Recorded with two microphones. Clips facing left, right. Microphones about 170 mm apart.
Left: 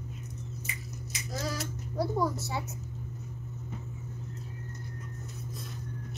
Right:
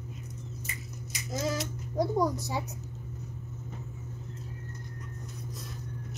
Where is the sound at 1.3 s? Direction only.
20° right (ahead or behind).